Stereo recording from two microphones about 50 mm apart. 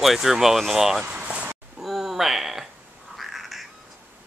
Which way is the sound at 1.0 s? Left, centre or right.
Right.